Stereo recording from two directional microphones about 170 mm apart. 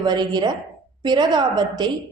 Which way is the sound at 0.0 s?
25° right (ahead or behind).